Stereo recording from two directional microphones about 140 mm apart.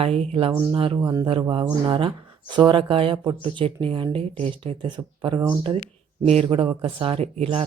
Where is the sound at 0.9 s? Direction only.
25° right (ahead or behind).